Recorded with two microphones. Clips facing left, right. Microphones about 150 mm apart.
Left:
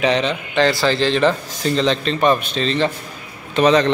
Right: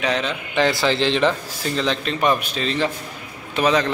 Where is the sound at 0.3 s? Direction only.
10° right (ahead or behind).